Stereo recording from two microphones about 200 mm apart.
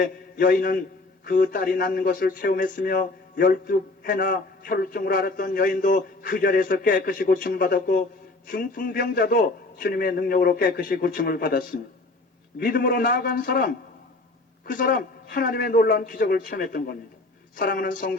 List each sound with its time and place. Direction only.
0.0 s a man's voice: 45° left (ahead or behind)
12.8 s a man's voice: 45° left (ahead or behind)